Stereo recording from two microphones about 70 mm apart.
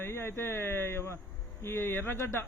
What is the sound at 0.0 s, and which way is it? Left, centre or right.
Speech, left.